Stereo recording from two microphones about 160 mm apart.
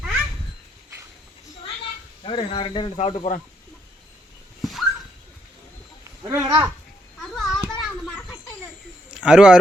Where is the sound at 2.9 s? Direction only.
45° left (ahead or behind).